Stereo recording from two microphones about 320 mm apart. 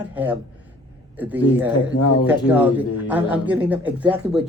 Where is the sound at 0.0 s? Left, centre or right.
Centre.